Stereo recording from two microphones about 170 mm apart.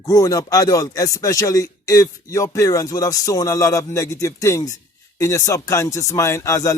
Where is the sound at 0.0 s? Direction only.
20° left (ahead or behind).